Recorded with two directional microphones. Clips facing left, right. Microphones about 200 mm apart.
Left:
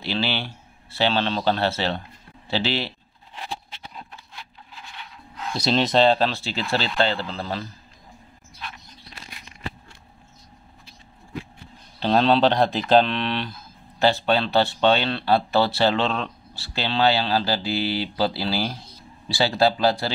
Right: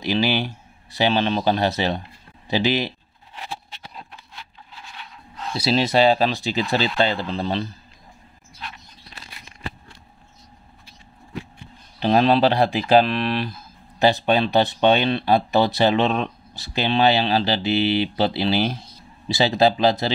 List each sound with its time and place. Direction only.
0.0 s speech: 15° right (ahead or behind)
5.5 s speech: 5° right (ahead or behind)
12.0 s speech: 10° right (ahead or behind)